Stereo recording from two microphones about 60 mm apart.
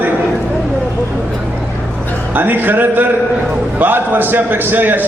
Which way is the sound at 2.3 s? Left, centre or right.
Right.